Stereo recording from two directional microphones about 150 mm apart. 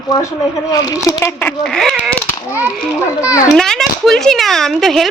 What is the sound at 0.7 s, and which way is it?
Speech, 25° left (ahead or behind).